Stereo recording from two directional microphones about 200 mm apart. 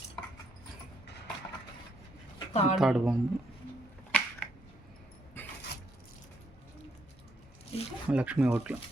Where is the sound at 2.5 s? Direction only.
35° left (ahead or behind).